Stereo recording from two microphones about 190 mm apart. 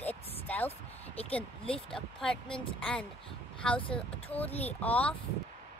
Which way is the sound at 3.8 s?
30° left (ahead or behind).